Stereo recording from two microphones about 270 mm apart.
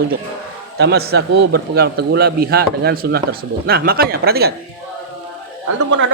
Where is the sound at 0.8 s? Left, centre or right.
Right.